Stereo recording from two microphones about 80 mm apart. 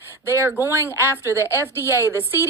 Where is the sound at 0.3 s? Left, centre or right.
Right.